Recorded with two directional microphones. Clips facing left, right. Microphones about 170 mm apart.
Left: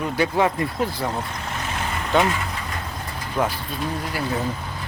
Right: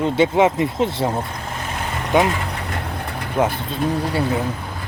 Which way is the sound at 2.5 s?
65° right (ahead or behind).